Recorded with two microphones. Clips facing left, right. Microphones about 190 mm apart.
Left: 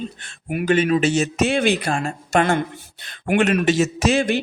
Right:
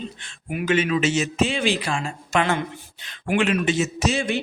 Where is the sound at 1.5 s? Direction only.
65° left (ahead or behind).